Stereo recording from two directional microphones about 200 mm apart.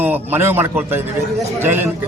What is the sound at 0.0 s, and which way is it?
A man's voice, 10° right (ahead or behind).